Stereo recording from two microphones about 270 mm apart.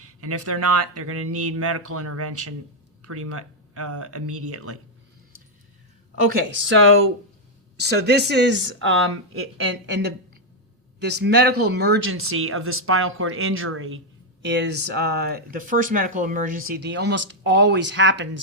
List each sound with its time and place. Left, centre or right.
0.0 s speech: right
6.2 s speech: right